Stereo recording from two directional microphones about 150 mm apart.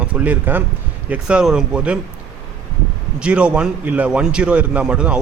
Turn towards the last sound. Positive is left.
turn(degrees=-5)  # may be behind; listen again after turning